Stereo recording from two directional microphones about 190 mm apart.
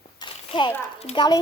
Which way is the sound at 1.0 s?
30° left (ahead or behind).